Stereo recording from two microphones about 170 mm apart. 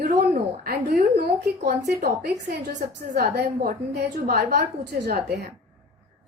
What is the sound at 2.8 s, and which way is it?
Speech, 65° right (ahead or behind).